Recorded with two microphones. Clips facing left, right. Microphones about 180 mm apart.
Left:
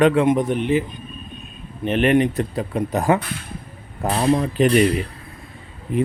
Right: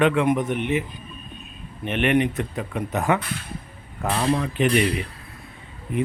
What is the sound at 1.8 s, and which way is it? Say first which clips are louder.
Speech: left 4 dB; 35° left (ahead or behind).